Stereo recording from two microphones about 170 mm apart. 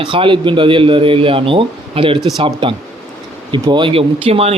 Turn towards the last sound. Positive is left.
turn(degrees=-35)  # may be behind; listen again after turning